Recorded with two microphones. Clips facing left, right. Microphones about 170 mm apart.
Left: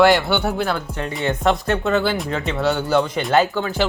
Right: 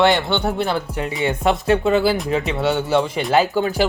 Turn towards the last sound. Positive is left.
turn(degrees=-5)  # may be behind; listen again after turning